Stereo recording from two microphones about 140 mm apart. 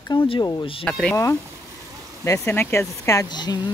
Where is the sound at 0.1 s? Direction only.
30° left (ahead or behind).